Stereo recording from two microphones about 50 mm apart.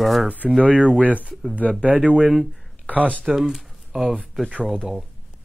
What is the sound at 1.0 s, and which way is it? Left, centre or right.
Speech, right.